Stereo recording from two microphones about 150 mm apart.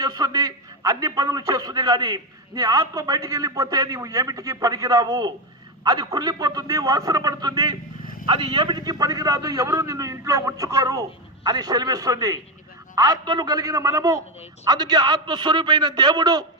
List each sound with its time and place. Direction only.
0.0 s a man's voice: 25° right (ahead or behind)